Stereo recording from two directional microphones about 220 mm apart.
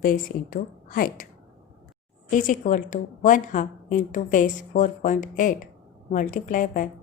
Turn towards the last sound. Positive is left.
turn(degrees=35)  # may be behind; listen again after turning